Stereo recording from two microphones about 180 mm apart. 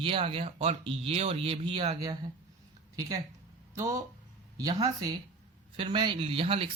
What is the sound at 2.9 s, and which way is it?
Speech, 20° right (ahead or behind).